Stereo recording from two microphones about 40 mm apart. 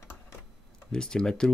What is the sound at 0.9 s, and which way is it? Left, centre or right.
Speech, centre.